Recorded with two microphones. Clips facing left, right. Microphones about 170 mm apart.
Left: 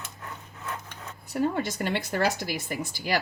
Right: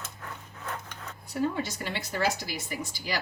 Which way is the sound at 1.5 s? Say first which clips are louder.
Left 5 dB; 50° left (ahead or behind).